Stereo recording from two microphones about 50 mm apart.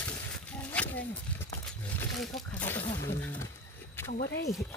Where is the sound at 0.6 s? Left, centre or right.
Left.